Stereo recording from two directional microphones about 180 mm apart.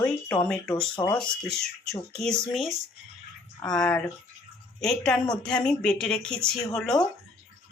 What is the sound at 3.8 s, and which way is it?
Speech, 5° left (ahead or behind).